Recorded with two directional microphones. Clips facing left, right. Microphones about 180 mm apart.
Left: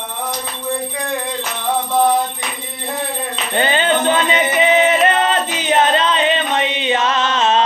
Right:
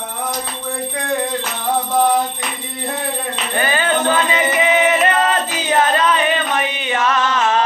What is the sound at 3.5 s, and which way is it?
Music, 25° left (ahead or behind).